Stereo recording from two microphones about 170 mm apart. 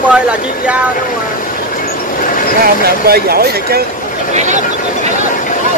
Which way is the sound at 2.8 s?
65° right (ahead or behind).